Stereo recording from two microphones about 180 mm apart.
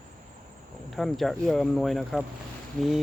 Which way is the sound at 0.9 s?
Centre (ahead or behind).